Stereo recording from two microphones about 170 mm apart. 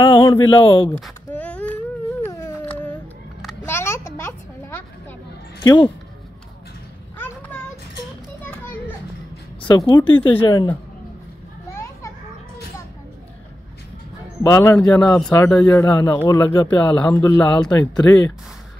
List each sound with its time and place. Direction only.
0.0 s speech: 30° left (ahead or behind)
0.9 s baby cry: 5° left (ahead or behind)
2.2 s a sound: 15° left (ahead or behind)
5.6 s speech: 25° left (ahead or behind)
9.7 s speech: 25° left (ahead or behind)
11.7 s children playing: 15° left (ahead or behind)
14.4 s speech: 20° left (ahead or behind)
15.0 s speech: 5° left (ahead or behind)
15.3 s speech: 15° left (ahead or behind)
16.7 s speech: 25° left (ahead or behind)
17.6 s speech: 5° left (ahead or behind)